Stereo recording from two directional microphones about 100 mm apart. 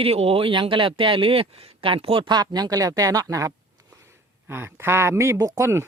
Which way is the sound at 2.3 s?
45° right (ahead or behind).